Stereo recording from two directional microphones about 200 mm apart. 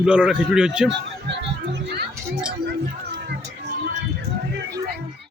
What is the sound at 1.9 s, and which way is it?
Children playing, 55° right (ahead or behind).